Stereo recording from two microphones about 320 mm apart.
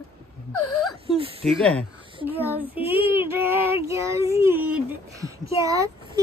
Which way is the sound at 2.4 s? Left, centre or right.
Centre.